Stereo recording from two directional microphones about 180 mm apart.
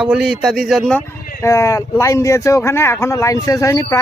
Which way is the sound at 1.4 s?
15° left (ahead or behind).